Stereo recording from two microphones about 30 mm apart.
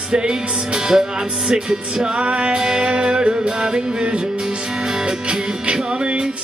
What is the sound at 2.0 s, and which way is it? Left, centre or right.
Music, right.